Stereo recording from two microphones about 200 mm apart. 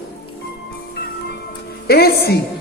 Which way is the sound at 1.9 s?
50° left (ahead or behind).